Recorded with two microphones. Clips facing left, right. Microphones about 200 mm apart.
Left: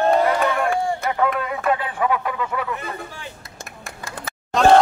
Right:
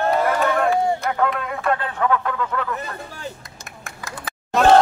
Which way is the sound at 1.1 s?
Centre (ahead or behind).